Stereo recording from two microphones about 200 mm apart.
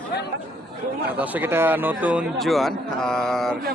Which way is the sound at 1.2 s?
10° right (ahead or behind).